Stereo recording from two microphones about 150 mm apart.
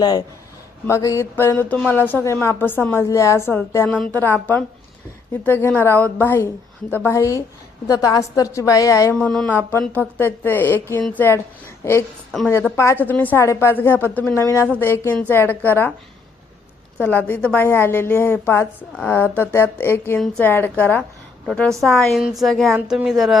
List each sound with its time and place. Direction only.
0.0 s a woman's voice: 25° left (ahead or behind)
3.8 s a woman's voice: 5° left (ahead or behind)
9.1 s a woman's voice: 5° left (ahead or behind)
12.7 s a woman's voice: 20° left (ahead or behind)
17.0 s a woman's voice: 10° left (ahead or behind)